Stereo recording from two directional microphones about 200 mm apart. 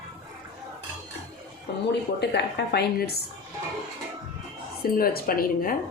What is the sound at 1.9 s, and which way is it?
A woman's voice, 60° left (ahead or behind).